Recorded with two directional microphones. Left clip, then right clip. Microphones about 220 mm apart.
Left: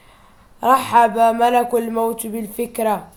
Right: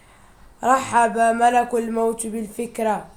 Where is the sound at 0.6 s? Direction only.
20° left (ahead or behind).